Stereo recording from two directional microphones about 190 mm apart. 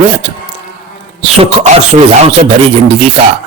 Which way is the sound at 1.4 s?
35° right (ahead or behind).